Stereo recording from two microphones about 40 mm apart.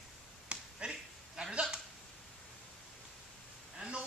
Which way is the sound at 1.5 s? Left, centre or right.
Right.